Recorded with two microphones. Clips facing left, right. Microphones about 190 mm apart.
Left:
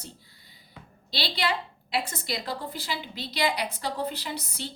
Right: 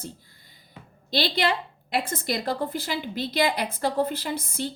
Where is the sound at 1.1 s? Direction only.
50° right (ahead or behind).